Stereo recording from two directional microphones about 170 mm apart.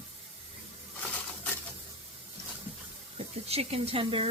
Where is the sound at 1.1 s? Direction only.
10° left (ahead or behind).